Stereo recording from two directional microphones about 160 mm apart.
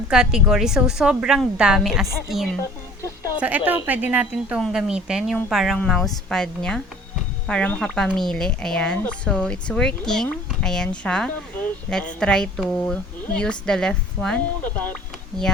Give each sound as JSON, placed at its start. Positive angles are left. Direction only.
{"t": 0.1, "sound": "speech", "side_deg": -5}
{"t": 3.0, "sound": "a sound", "side_deg": 20}
{"t": 3.4, "sound": "speech", "side_deg": -10}